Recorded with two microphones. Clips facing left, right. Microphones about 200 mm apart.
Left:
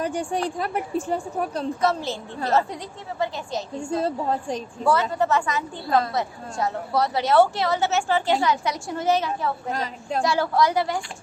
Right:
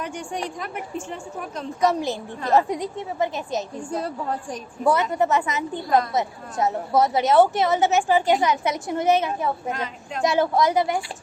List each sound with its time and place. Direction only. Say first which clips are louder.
0.0 s a woman's voice: left 4 dB; 35° left (ahead or behind)
1.8 s a woman's voice: right 5 dB; 15° right (ahead or behind)
3.8 s a woman's voice: left 3 dB; 25° left (ahead or behind)
4.8 s a woman's voice: right 2 dB; 20° right (ahead or behind)
9.7 s a woman's voice: left 3 dB; 35° left (ahead or behind)
10.2 s a woman's voice: right 3 dB; 20° right (ahead or behind)